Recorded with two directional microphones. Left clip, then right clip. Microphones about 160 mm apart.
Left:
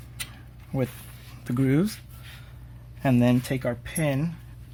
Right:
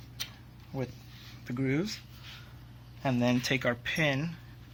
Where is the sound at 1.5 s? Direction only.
60° left (ahead or behind).